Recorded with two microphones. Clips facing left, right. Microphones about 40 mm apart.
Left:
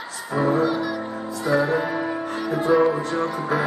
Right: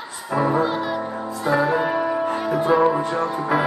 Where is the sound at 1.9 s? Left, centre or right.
Centre.